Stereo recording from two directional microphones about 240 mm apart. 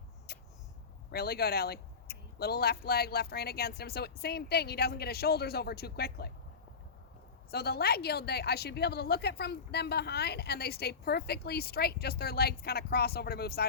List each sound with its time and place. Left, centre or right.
0.3 s a sound: left
1.1 s a woman's voice: left
7.5 s a woman's voice: left